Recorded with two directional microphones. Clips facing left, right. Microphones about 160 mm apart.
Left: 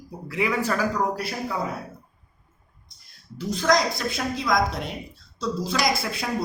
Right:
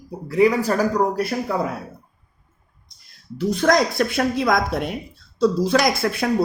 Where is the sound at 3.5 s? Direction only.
60° right (ahead or behind).